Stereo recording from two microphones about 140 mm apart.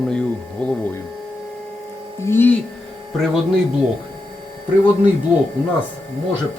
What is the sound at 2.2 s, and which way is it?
Speech, 15° left (ahead or behind).